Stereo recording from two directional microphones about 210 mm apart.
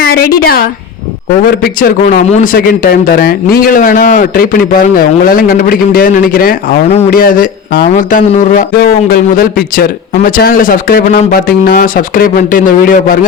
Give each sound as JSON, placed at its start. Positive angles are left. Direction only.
{"t": 0.0, "sound": "a woman's voice", "side_deg": 45}
{"t": 1.8, "sound": "speech", "side_deg": 40}